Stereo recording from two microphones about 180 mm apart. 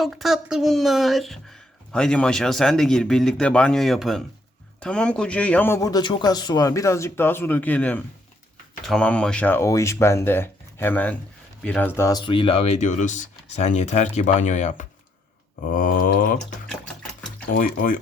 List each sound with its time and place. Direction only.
0.0 s speech: centre (ahead or behind); by 14.8 s 40° left (ahead or behind)
15.6 s mantra: 50° left (ahead or behind)
16.6 s a sound: 5° left (ahead or behind)
17.5 s mantra: 50° left (ahead or behind)